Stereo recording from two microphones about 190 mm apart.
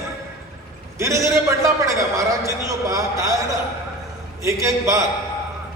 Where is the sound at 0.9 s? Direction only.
15° right (ahead or behind).